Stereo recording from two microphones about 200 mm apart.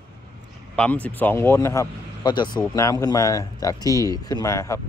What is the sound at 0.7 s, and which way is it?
Speech, 5° left (ahead or behind).